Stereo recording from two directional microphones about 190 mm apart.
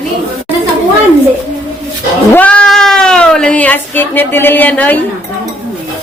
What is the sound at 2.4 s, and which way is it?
Cat, 5° left (ahead or behind).